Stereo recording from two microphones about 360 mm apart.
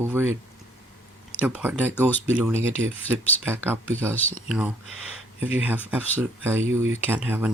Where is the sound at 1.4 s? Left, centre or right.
Centre.